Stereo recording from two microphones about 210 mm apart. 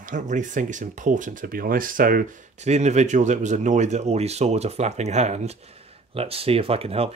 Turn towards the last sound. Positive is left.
turn(degrees=-30)  # may be behind; listen again after turning